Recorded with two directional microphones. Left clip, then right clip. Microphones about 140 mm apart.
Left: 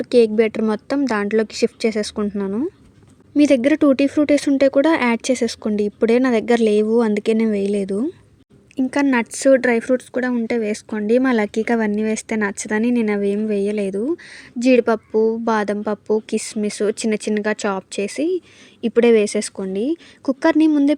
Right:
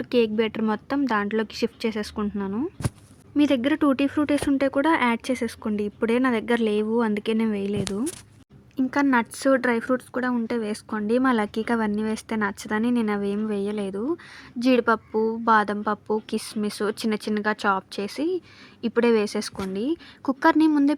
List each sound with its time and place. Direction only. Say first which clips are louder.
0.0 s a woman's voice: left 8 dB; 30° left (ahead or behind)
3.3 s a woman's voice: left 7 dB; 40° left (ahead or behind)